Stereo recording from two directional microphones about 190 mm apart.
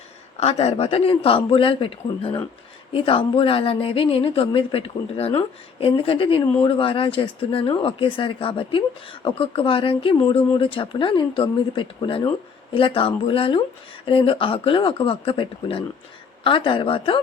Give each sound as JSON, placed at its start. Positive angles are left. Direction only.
{"t": 0.3, "sound": "speech", "side_deg": 30}